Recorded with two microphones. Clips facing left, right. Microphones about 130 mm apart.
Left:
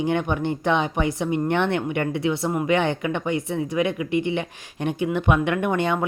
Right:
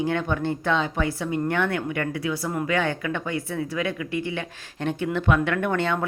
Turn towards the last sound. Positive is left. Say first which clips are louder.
# left 2 dB
turn(degrees=15)  # may be behind; listen again after turning